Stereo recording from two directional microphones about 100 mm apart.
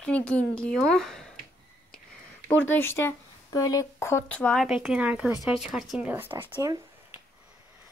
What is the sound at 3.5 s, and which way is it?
Speech, 35° left (ahead or behind).